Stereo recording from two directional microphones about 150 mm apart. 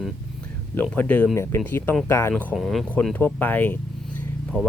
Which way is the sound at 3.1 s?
10° left (ahead or behind).